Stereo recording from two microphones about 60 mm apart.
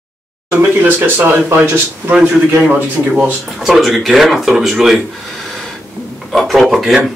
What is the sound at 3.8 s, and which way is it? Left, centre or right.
Speech, centre.